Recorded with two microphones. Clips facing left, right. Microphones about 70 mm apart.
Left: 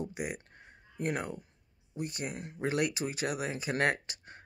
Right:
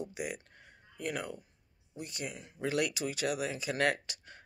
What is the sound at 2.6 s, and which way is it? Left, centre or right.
Speech, left.